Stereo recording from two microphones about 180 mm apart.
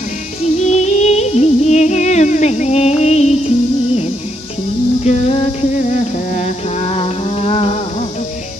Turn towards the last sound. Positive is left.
turn(degrees=35)  # may be behind; listen again after turning